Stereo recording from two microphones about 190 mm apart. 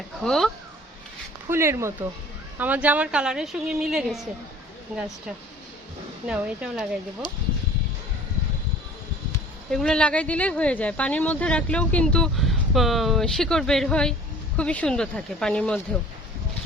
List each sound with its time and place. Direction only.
0.3 s speech: centre (ahead or behind)
1.5 s speech: 15° right (ahead or behind)
6.2 s speech: 5° right (ahead or behind)
7.2 s speech: 25° left (ahead or behind)
9.7 s speech: 5° left (ahead or behind)